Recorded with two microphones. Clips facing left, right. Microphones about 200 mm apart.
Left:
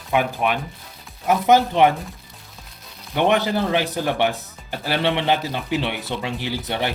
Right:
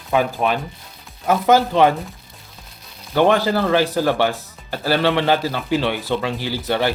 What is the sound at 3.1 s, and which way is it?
Speech, 20° left (ahead or behind).